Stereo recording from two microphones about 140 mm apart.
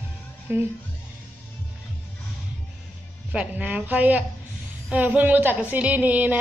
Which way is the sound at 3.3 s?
10° right (ahead or behind).